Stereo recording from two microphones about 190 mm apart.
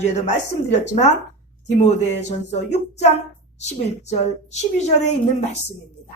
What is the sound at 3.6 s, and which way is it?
A woman's voice, 35° left (ahead or behind).